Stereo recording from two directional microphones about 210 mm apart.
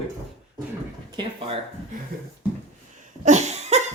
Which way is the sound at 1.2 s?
25° right (ahead or behind).